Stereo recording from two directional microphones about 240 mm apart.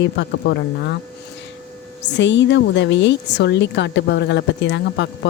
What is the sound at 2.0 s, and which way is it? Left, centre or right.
A woman's voice, left.